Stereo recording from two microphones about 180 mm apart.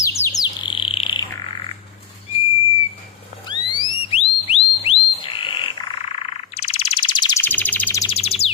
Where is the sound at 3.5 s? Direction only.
25° left (ahead or behind).